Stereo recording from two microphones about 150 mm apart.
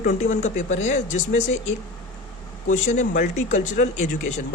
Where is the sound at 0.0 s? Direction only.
55° left (ahead or behind).